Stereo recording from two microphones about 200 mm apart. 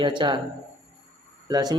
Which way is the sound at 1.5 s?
20° right (ahead or behind).